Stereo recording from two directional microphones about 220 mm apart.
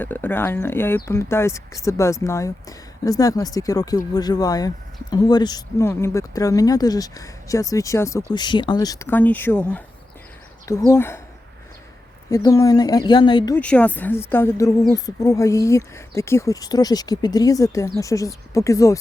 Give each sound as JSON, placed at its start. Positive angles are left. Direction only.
{"t": 0.0, "sound": "speech", "side_deg": 10}
{"t": 12.3, "sound": "speech", "side_deg": 15}
{"t": 13.6, "sound": "speech", "side_deg": 5}